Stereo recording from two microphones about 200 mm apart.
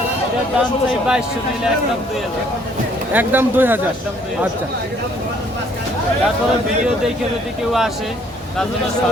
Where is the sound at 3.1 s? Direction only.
10° right (ahead or behind).